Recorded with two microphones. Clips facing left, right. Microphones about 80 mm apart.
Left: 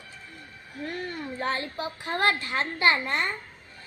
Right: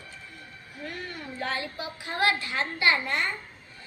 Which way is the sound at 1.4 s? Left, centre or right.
Left.